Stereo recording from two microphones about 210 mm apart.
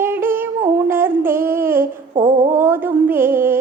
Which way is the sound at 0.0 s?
10° right (ahead or behind).